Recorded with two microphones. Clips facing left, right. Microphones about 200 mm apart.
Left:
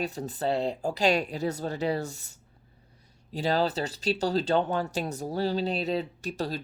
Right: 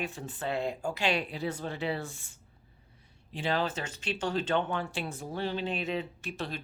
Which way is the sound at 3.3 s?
40° left (ahead or behind).